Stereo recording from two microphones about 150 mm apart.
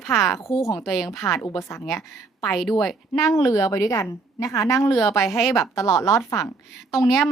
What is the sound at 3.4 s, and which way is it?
A woman's voice, 20° left (ahead or behind).